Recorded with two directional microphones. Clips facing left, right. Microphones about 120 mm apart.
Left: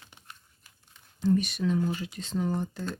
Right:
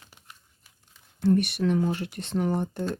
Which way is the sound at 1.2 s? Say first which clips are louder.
Right 3 dB; 65° right (ahead or behind).